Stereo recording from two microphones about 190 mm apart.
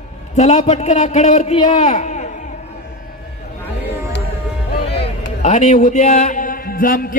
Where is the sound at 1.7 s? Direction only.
35° left (ahead or behind).